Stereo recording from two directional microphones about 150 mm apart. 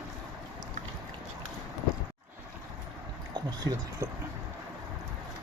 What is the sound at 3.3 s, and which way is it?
Speech, 25° right (ahead or behind).